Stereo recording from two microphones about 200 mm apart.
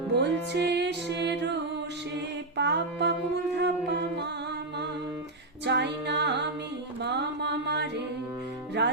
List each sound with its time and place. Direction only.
0.1 s music: 60° right (ahead or behind)
2.6 s mantra: 60° right (ahead or behind)
5.6 s music: 60° right (ahead or behind)